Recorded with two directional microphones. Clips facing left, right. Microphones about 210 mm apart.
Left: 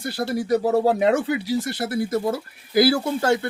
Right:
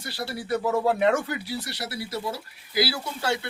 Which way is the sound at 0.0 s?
50° left (ahead or behind).